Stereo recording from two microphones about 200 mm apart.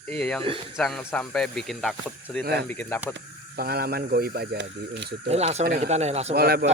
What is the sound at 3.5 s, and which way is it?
Speech, 50° right (ahead or behind).